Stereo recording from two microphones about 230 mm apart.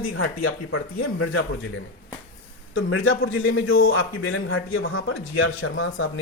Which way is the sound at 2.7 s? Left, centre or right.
Left.